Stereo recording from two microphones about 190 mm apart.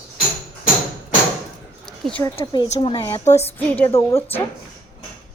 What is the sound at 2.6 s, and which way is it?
Speech, 35° left (ahead or behind).